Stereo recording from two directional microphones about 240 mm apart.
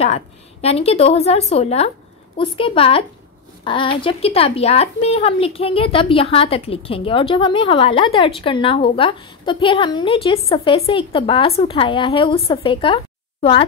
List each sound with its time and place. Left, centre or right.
0.0 s speech: left